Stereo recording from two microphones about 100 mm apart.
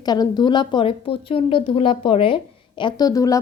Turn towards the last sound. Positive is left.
turn(degrees=35)  # may be behind; listen again after turning